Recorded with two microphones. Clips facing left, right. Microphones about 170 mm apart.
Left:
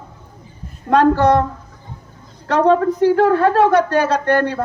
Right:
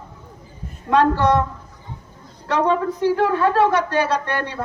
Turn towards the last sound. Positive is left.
turn(degrees=45)  # may be behind; listen again after turning